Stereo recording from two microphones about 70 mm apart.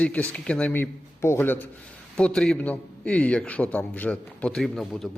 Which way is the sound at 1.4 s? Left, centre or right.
Left.